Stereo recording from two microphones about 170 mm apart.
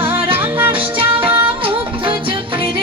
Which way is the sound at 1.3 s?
10° right (ahead or behind).